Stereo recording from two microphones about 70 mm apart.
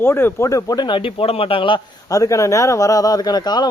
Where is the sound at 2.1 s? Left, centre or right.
Left.